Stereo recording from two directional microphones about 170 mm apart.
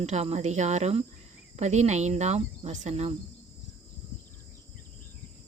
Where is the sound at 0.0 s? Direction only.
40° right (ahead or behind).